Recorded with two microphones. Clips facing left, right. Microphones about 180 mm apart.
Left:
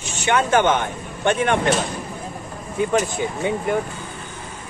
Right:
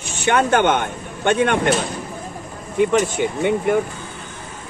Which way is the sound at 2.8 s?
75° right (ahead or behind).